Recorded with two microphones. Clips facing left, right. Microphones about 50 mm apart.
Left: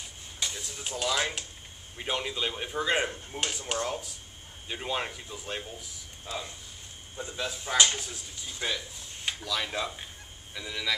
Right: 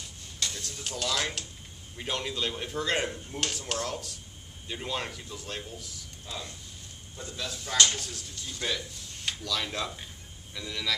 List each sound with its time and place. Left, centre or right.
0.4 s speech: centre
7.2 s speech: centre